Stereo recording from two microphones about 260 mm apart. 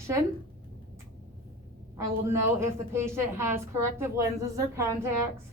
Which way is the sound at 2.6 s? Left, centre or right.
Centre.